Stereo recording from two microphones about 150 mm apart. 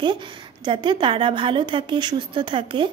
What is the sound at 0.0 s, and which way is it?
Speech, 30° right (ahead or behind).